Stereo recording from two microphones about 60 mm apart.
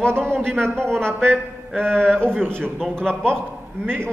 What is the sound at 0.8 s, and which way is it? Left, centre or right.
A man's voice, centre.